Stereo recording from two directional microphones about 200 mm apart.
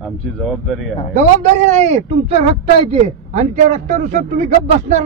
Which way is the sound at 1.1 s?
35° right (ahead or behind).